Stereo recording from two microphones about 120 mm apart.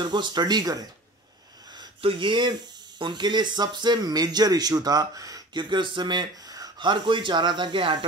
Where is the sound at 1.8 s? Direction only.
45° right (ahead or behind).